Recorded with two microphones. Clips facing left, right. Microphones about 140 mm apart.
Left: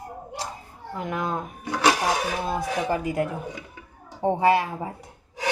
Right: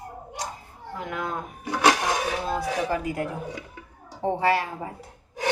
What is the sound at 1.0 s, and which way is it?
Speech, 25° left (ahead or behind).